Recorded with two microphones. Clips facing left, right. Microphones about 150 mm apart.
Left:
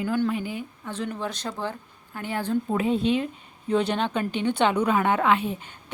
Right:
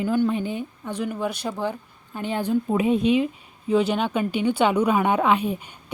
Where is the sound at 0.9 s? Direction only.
10° right (ahead or behind).